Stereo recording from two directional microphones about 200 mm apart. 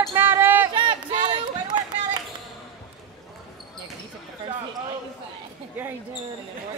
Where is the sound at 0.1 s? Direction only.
10° right (ahead or behind).